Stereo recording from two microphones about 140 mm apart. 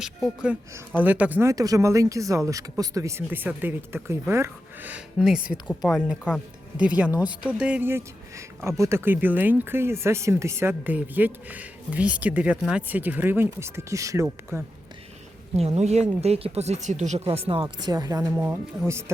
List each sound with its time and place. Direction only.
0.7 s speech: 10° right (ahead or behind)
6.7 s speech: 10° right (ahead or behind)
15.5 s speech: 50° right (ahead or behind); by 19.1 s 20° right (ahead or behind)